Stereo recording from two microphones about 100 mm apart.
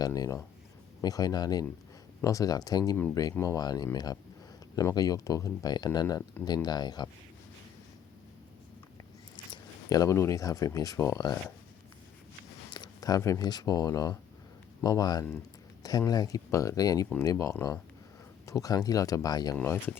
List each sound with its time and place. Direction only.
0.0 s speech: 35° left (ahead or behind)
9.3 s speech: 45° left (ahead or behind)
12.7 s speech: 45° left (ahead or behind)
19.5 s speech: 25° left (ahead or behind)